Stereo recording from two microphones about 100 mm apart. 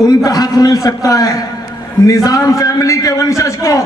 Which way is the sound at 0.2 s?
35° left (ahead or behind).